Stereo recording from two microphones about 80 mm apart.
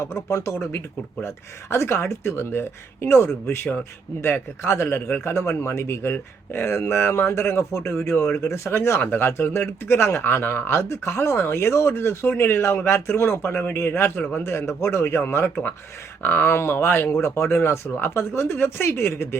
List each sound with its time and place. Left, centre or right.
0.3 s speech: left
1.7 s speech: left